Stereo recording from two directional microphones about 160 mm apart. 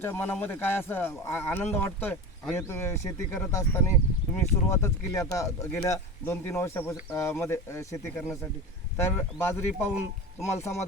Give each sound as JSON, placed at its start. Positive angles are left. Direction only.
{"t": 0.0, "sound": "speech", "side_deg": 15}